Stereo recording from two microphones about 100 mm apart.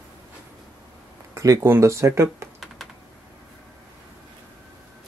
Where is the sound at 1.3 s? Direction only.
30° right (ahead or behind).